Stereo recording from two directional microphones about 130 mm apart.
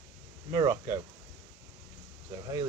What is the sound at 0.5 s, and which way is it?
Speech, 30° right (ahead or behind).